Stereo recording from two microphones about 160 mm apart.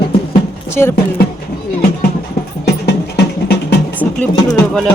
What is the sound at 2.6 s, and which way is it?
Music, 90° left.